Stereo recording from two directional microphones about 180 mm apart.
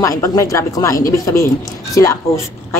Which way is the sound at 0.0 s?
15° left (ahead or behind).